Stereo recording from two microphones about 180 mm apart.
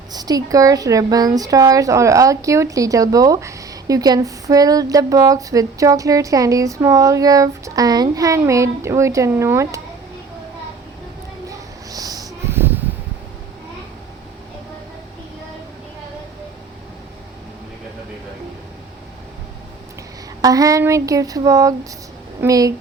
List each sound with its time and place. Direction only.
0.1 s speech: 20° right (ahead or behind)
11.4 s a sound: 20° right (ahead or behind)
20.4 s speech: 20° right (ahead or behind)